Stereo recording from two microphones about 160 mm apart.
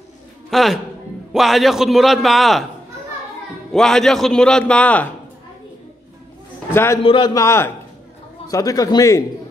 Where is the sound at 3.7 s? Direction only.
5° left (ahead or behind).